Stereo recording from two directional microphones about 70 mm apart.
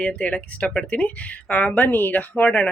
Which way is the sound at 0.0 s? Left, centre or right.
Centre.